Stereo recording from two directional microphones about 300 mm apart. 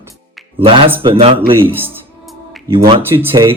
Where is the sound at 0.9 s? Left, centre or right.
Centre.